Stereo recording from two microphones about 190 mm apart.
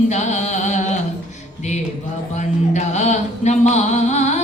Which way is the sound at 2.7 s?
35° left (ahead or behind).